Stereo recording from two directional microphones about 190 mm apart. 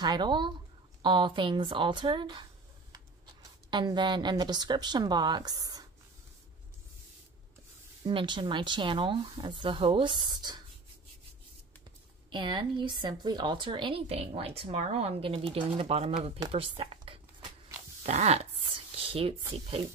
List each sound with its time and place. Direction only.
0.0 s speech: 20° right (ahead or behind)
3.7 s speech: 25° right (ahead or behind)
8.0 s speech: 25° right (ahead or behind)
12.3 s speech: 25° right (ahead or behind)
18.0 s a sound: 35° right (ahead or behind)